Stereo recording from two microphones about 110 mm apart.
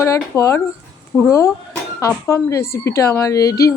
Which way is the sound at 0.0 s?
25° left (ahead or behind).